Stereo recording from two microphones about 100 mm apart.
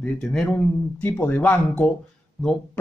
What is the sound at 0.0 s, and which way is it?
Speech, 10° left (ahead or behind).